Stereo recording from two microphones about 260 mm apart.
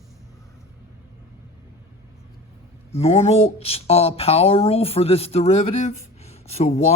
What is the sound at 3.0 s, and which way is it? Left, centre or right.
Speech, left.